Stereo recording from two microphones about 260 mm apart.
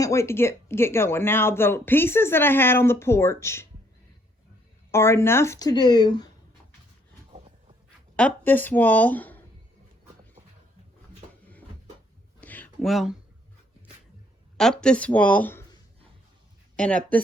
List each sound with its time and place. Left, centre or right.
0.0 s speech: centre
4.9 s speech: centre
7.3 s dog: right
8.1 s speech: centre
12.4 s a sound: centre
14.6 s speech: centre